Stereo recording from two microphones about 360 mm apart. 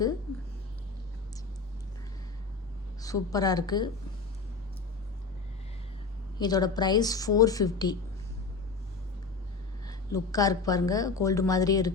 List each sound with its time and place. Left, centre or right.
3.0 s a woman's voice: centre
6.4 s a woman's voice: centre
9.8 s a woman's voice: centre